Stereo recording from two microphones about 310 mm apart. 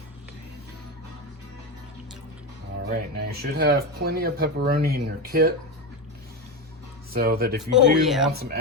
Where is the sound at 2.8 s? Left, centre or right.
Right.